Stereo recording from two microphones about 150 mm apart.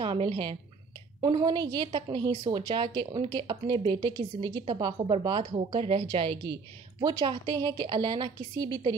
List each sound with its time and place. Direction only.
0.0 s a woman's voice: 35° right (ahead or behind)